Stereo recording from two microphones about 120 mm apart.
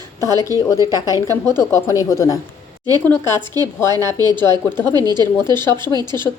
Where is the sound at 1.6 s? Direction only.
25° left (ahead or behind).